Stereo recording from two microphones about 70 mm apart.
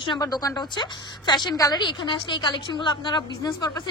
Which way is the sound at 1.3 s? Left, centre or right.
Left.